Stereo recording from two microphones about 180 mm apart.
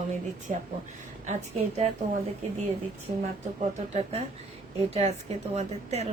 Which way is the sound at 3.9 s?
35° right (ahead or behind).